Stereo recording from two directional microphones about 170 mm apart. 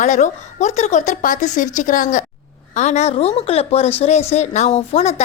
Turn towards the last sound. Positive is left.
turn(degrees=40)  # may be behind; listen again after turning